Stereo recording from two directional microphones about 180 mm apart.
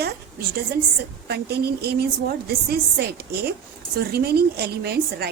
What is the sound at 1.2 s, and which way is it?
A woman's voice, 65° right (ahead or behind).